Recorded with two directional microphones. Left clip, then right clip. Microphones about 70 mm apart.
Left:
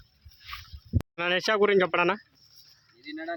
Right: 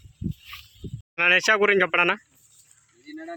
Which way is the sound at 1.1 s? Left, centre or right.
Centre.